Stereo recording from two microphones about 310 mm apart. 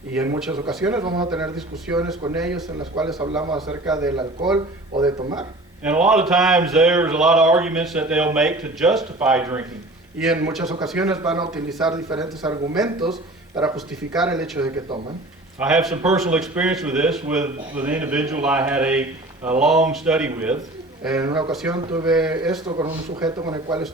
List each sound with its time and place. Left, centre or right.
0.1 s speech: centre
1.0 s speech: centre
1.3 s speech: centre
3.9 s speech: centre
14.6 s speech: centre
15.5 s speech: centre
21.2 s speech: centre
22.0 s speech: centre